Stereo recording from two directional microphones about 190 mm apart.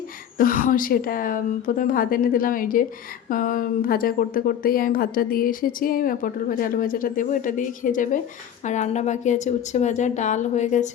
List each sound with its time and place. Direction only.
0.3 s a woman's voice: 45° left (ahead or behind)